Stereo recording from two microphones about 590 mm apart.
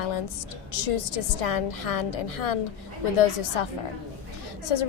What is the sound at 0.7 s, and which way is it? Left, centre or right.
A woman's voice, left.